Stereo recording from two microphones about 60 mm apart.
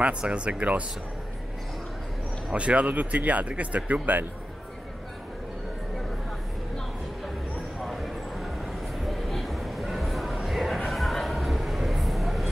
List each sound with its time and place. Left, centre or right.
0.2 s speech: centre
2.5 s speech: centre
7.8 s a sound: centre